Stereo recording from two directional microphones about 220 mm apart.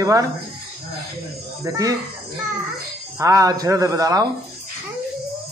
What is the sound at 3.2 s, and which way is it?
A man's voice, 15° right (ahead or behind).